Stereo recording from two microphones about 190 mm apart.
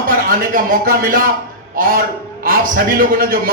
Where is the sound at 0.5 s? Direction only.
50° right (ahead or behind).